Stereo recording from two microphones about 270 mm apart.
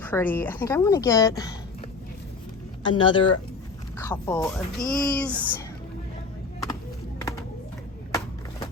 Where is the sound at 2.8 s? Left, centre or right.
Centre.